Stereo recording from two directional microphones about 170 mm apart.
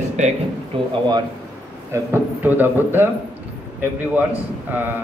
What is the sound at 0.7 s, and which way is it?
Speech, 30° right (ahead or behind).